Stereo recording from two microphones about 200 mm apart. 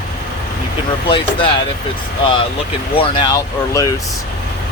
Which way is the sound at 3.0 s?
25° left (ahead or behind).